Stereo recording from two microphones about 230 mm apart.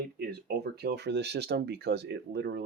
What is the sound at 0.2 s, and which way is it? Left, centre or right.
Speech, right.